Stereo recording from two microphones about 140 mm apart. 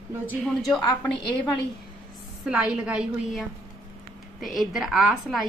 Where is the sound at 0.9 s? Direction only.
35° left (ahead or behind).